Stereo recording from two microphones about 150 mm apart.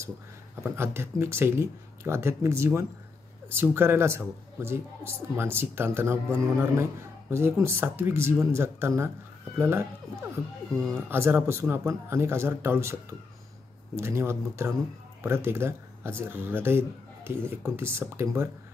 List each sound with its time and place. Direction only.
0.7 s speech: 15° right (ahead or behind)
13.9 s speech: 20° right (ahead or behind)